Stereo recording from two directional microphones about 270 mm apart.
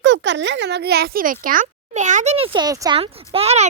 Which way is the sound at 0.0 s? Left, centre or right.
Right.